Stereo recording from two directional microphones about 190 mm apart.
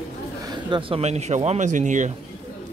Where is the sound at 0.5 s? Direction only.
25° right (ahead or behind); by 2.0 s 40° right (ahead or behind).